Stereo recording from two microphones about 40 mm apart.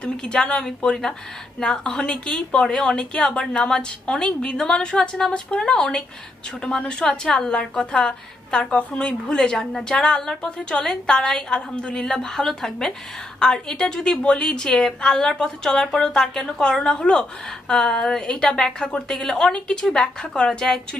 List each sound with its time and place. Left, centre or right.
0.0 s a woman's voice: left